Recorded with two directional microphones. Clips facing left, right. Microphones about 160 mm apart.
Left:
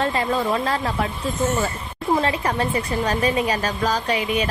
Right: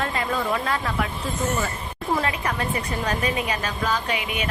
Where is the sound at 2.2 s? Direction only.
30° left (ahead or behind).